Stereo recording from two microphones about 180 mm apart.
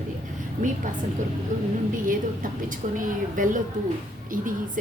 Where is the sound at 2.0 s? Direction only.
50° right (ahead or behind).